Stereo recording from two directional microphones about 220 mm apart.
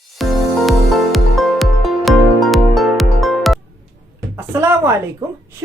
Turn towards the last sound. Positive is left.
turn(degrees=-10)  # may be behind; listen again after turning